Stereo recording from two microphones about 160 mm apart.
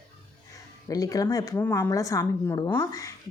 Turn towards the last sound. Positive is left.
turn(degrees=25)  # may be behind; listen again after turning